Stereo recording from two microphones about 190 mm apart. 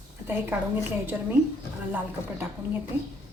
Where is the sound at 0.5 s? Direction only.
10° right (ahead or behind).